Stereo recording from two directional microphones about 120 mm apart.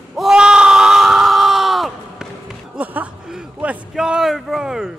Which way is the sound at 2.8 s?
15° right (ahead or behind).